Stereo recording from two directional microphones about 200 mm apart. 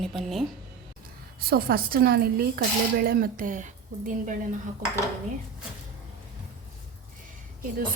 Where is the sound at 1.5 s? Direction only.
45° right (ahead or behind).